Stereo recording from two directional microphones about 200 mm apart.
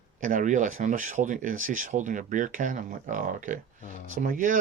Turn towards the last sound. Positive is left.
turn(degrees=-40)  # may be behind; listen again after turning